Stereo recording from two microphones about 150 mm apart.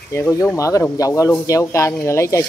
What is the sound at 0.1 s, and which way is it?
A man's voice, 20° left (ahead or behind).